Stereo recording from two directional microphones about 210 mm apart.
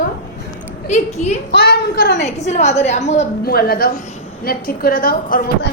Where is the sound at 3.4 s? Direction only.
45° left (ahead or behind).